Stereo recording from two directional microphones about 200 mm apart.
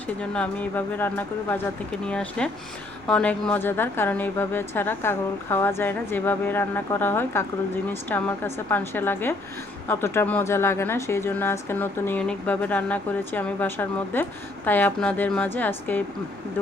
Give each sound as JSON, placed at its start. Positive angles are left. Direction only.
{"t": 0.2, "sound": "speech", "side_deg": 5}